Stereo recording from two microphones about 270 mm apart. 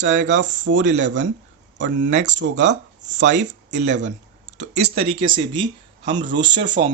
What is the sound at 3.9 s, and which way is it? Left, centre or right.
Clicking, right.